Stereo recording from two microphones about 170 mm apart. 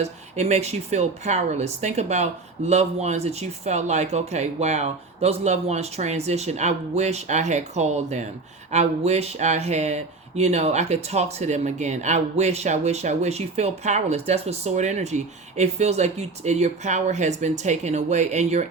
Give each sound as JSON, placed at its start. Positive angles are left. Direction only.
{"t": 0.0, "sound": "speech", "side_deg": -40}